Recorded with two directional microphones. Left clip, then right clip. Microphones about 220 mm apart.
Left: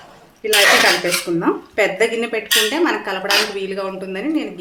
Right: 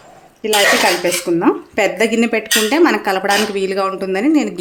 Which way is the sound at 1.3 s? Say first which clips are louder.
Right 3 dB; 40° right (ahead or behind).